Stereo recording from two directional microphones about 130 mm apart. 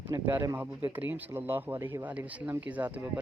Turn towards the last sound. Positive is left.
turn(degrees=-15)  # may be behind; listen again after turning